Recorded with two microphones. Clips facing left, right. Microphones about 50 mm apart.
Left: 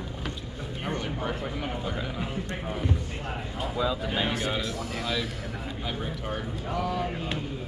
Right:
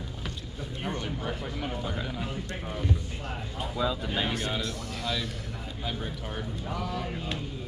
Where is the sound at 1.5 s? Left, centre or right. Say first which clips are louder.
Left 1 dB; centre.